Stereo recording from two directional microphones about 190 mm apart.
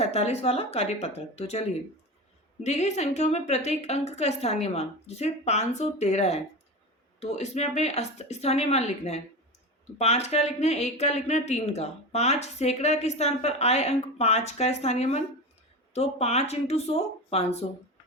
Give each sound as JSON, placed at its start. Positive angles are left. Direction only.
{"t": 0.0, "sound": "speech", "side_deg": 35}
{"t": 2.6, "sound": "speech", "side_deg": 35}